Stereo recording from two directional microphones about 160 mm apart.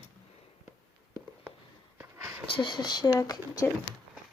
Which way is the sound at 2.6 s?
30° left (ahead or behind).